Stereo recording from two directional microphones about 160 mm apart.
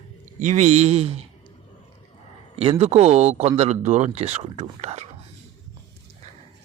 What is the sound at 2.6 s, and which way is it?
Speech, 40° right (ahead or behind).